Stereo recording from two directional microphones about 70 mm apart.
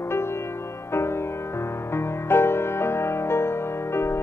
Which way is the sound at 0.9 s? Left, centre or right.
Left.